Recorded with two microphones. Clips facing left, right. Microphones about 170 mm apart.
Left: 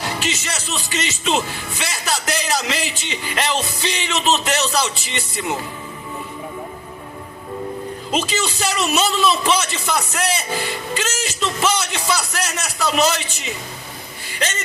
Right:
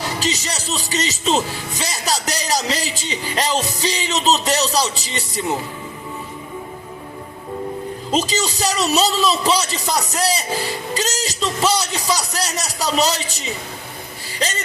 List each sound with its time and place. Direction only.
0.2 s a man's voice: 35° right (ahead or behind)
8.1 s a man's voice: 40° right (ahead or behind)